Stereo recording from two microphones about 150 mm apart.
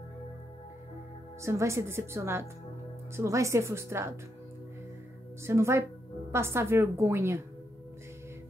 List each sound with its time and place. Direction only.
1.4 s a woman's voice: 20° right (ahead or behind)
5.4 s a woman's voice: 20° right (ahead or behind)